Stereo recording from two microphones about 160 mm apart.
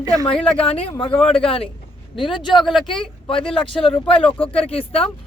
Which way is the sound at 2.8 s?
35° left (ahead or behind).